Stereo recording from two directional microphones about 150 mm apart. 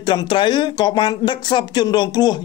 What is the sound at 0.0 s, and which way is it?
Speech, 30° left (ahead or behind).